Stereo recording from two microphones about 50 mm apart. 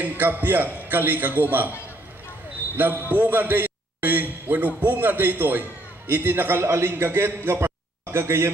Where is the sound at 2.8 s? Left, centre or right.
Right.